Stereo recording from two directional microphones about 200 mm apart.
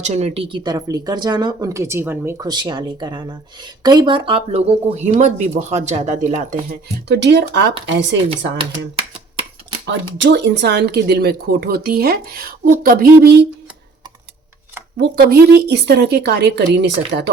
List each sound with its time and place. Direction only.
0.0 s a woman's voice: 35° right (ahead or behind); by 8.1 s 60° right (ahead or behind)
9.8 s speech: 60° right (ahead or behind)
14.9 s a woman's voice: 50° right (ahead or behind)